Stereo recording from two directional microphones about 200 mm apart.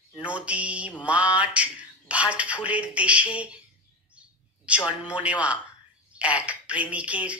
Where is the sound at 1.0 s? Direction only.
5° right (ahead or behind).